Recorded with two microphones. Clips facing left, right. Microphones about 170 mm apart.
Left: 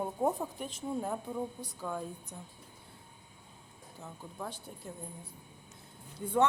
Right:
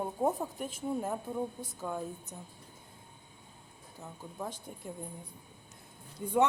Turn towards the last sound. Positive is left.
turn(degrees=-10)  # may be behind; listen again after turning